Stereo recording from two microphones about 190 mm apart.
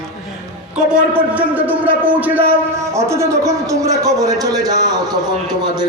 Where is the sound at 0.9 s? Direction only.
5° right (ahead or behind).